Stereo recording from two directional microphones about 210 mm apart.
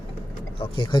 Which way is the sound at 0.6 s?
20° left (ahead or behind).